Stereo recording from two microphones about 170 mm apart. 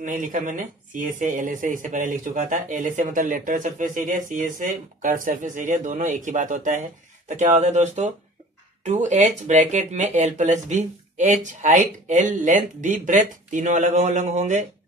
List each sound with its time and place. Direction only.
0.0 s speech: 50° right (ahead or behind)